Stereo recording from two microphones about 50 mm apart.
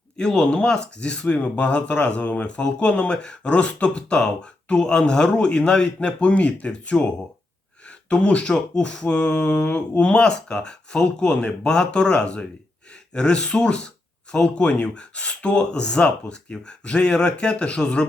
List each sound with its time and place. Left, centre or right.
0.2 s speech: centre